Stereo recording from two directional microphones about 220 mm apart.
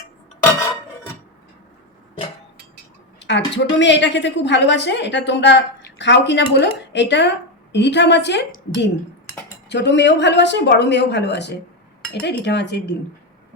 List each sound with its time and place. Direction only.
3.2 s a woman's voice: 55° left (ahead or behind)